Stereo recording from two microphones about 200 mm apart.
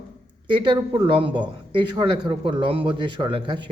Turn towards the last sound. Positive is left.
turn(degrees=-25)  # may be behind; listen again after turning